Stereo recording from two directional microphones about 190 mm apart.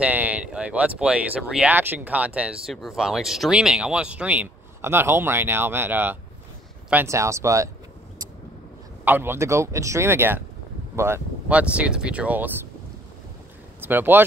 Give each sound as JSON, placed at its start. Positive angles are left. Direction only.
{"t": 0.0, "sound": "speech", "side_deg": -10}
{"t": 9.0, "sound": "speech", "side_deg": -10}
{"t": 13.7, "sound": "speech", "side_deg": -10}